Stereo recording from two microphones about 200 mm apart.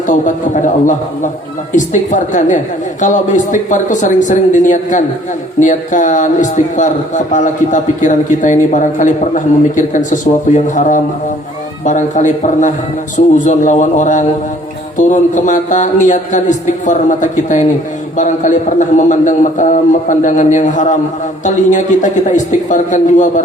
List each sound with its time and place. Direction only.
0.1 s a man's voice: 40° left (ahead or behind)